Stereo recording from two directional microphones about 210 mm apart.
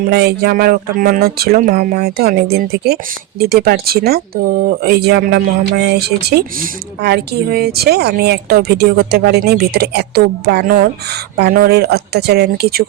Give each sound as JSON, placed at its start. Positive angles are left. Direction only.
{"t": 0.0, "sound": "speech", "side_deg": -50}